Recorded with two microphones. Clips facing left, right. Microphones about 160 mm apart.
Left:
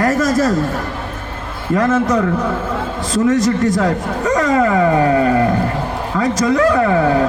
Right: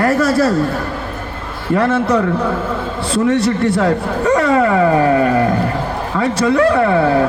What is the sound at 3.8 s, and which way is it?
Speech, 35° right (ahead or behind).